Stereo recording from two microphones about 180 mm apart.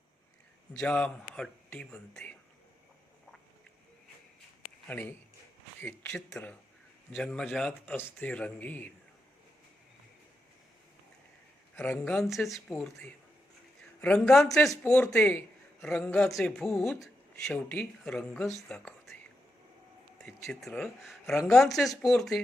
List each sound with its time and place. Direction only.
0.7 s speech: 5° left (ahead or behind)
4.9 s speech: 10° left (ahead or behind)
11.8 s speech: 5° left (ahead or behind)
20.2 s speech: 5° left (ahead or behind)